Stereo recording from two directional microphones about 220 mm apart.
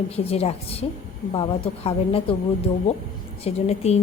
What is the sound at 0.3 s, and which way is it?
A woman's voice, 25° left (ahead or behind).